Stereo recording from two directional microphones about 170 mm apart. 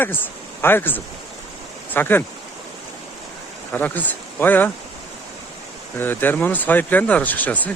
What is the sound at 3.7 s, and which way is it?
Speech, 10° left (ahead or behind).